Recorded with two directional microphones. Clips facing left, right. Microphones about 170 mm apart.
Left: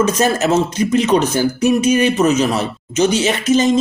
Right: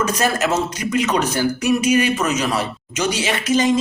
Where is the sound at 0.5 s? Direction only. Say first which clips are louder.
Left 5 dB; 25° left (ahead or behind).